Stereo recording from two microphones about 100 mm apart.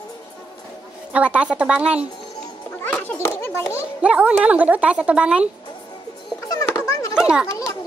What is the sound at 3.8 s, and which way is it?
A woman's voice, 15° right (ahead or behind).